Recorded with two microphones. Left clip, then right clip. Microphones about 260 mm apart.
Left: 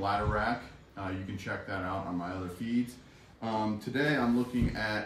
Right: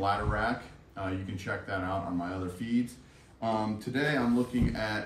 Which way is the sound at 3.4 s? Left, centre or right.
Centre.